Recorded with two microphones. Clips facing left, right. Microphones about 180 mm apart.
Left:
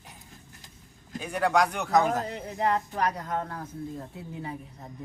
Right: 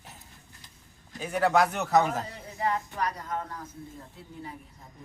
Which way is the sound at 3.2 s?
65° left (ahead or behind).